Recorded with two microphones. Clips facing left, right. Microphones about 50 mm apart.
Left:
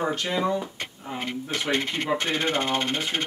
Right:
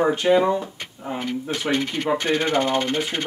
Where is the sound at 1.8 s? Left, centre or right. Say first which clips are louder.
Right 3 dB; left.